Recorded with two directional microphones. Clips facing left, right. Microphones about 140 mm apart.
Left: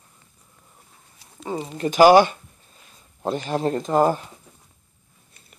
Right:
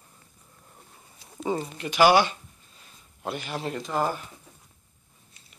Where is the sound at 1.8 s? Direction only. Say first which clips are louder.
Left 7 dB; 40° left (ahead or behind).